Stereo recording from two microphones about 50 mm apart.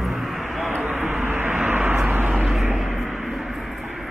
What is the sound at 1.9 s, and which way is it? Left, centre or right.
Vehicle, right.